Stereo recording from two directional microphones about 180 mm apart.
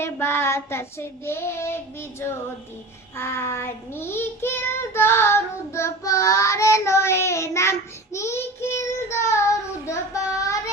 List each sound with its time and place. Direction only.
0.0 s child singing: 15° left (ahead or behind)